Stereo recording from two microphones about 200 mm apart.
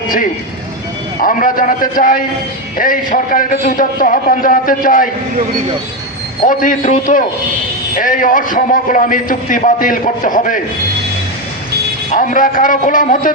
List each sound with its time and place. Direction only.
1.2 s a man's voice: 40° left (ahead or behind)
6.5 s a man's voice: 40° left (ahead or behind)
7.9 s a man's voice: 40° left (ahead or behind)
12.1 s a man's voice: 40° left (ahead or behind)